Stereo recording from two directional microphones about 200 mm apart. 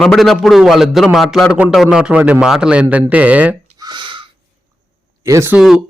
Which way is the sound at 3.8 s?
20° right (ahead or behind).